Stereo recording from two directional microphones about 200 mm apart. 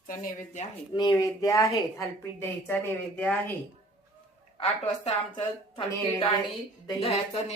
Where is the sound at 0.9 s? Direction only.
20° left (ahead or behind).